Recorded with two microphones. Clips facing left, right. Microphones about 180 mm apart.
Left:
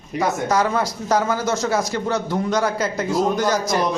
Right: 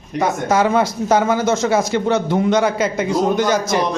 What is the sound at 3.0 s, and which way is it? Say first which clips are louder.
Speech: right 2 dB; centre (ahead or behind).